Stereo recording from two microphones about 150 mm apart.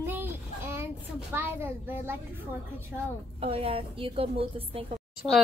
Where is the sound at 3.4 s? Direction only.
40° right (ahead or behind).